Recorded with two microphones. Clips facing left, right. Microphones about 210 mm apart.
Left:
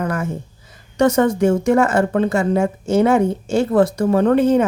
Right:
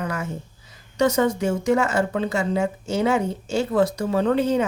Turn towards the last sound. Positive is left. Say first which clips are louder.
# left 6 dB
turn(degrees=50)  # may be behind; listen again after turning